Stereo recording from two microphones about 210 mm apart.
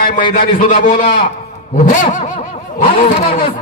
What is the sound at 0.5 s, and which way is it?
A man's voice, 40° left (ahead or behind).